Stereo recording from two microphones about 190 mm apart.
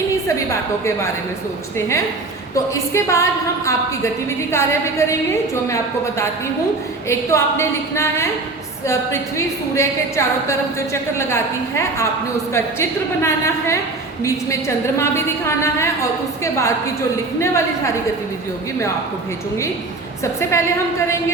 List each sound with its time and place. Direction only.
2.9 s a woman's voice: 15° left (ahead or behind)
4.5 s a woman's voice: 15° left (ahead or behind)
9.7 s a woman's voice: 15° left (ahead or behind)
14.9 s a woman's voice: 15° left (ahead or behind)
20.5 s a woman's voice: 15° left (ahead or behind)